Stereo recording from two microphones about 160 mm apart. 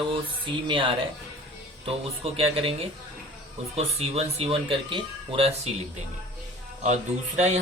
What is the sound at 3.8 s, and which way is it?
Speech, 40° right (ahead or behind).